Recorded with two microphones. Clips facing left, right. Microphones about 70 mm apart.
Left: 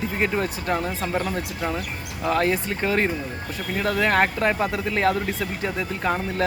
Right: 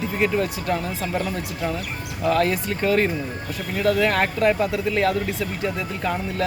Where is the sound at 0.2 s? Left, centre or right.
Left.